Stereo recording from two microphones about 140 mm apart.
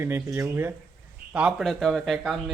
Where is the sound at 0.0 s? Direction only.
20° right (ahead or behind).